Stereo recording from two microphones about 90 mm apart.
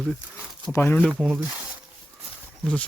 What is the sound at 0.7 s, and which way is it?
Speech, 25° left (ahead or behind).